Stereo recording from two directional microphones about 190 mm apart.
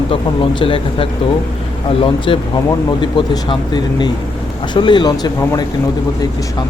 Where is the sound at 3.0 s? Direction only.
25° left (ahead or behind).